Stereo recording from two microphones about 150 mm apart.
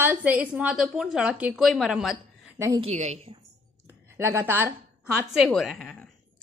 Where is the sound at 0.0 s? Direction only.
10° right (ahead or behind).